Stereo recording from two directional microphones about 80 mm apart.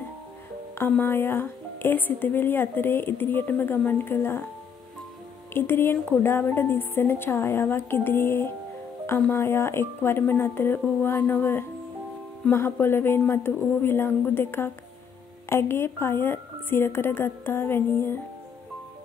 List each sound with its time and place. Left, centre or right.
0.7 s a woman's voice: left
5.5 s a woman's voice: left